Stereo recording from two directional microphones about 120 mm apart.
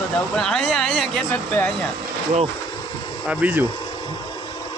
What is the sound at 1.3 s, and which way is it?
Speech, 15° left (ahead or behind).